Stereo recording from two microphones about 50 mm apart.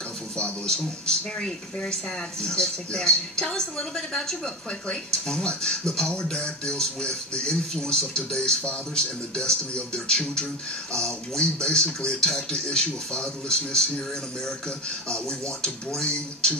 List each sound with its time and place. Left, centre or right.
0.4 s speech: centre
15.0 s speech: centre